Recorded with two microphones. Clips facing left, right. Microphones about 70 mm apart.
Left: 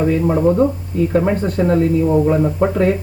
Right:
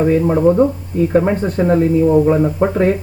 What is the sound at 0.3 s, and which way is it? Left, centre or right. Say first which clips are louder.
Speech: right 2 dB; centre.